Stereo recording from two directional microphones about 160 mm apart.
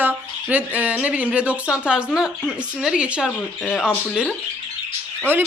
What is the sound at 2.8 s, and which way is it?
A woman's voice, 5° right (ahead or behind).